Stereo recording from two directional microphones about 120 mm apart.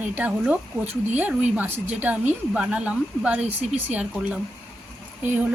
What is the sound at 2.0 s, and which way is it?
Speech, 15° right (ahead or behind).